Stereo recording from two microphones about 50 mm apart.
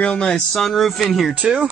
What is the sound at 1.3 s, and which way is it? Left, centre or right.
Speech, right.